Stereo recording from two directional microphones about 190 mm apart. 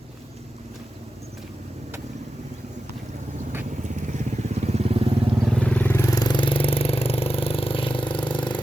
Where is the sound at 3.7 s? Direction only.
40° right (ahead or behind).